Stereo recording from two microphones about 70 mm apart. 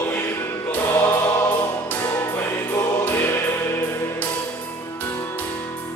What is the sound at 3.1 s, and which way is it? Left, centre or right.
Music, left.